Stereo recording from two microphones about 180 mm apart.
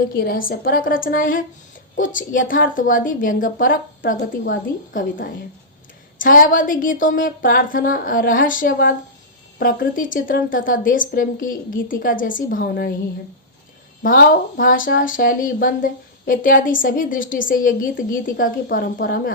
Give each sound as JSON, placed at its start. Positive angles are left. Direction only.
{"t": 0.2, "sound": "speech", "side_deg": 55}
{"t": 14.0, "sound": "speech", "side_deg": 50}